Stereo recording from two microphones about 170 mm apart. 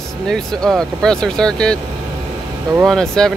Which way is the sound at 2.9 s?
5° left (ahead or behind).